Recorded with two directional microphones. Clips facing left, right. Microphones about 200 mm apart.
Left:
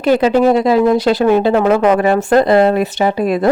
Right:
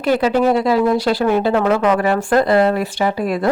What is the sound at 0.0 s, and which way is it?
Speech, 20° left (ahead or behind).